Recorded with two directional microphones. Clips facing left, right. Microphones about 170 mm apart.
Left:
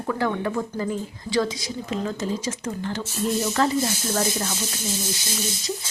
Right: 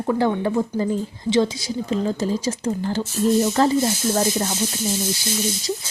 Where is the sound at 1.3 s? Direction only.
Centre (ahead or behind).